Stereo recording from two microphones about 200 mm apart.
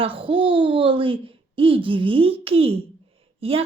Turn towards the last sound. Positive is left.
turn(degrees=-30)  # may be behind; listen again after turning